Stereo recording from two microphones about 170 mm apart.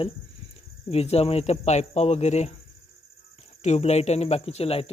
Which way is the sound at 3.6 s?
40° left (ahead or behind).